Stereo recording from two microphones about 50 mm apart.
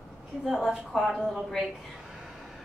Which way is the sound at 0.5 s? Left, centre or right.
Centre.